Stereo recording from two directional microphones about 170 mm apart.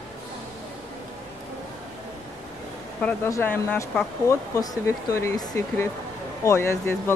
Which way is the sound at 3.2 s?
15° left (ahead or behind).